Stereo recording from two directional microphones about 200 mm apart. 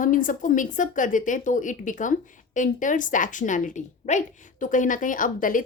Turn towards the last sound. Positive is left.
turn(degrees=40)  # may be behind; listen again after turning